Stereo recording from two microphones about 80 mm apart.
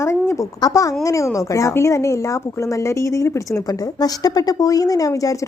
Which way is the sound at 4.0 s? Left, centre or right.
Left.